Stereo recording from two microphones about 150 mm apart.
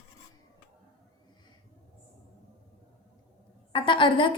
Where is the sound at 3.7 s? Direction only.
35° left (ahead or behind).